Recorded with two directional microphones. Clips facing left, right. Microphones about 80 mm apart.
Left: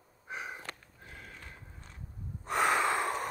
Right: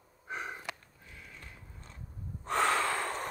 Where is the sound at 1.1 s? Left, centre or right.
Left.